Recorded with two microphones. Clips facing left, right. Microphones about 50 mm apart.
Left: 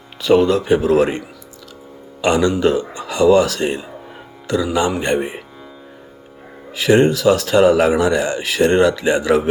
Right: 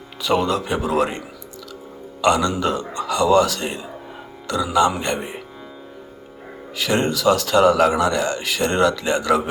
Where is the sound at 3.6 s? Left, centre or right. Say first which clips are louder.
Left 6 dB; centre.